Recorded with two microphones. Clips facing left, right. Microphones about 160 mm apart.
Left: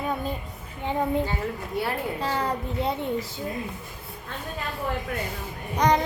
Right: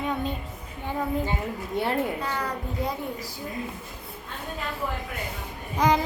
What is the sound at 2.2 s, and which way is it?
A child's voice, 30° left (ahead or behind).